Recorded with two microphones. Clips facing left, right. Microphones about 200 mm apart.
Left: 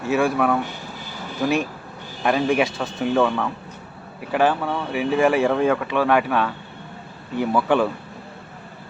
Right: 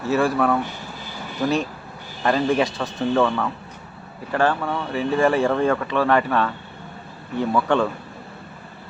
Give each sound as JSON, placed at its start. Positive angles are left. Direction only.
{"t": 0.2, "sound": "speech", "side_deg": 5}
{"t": 4.3, "sound": "speech", "side_deg": 15}
{"t": 4.6, "sound": "speech", "side_deg": 5}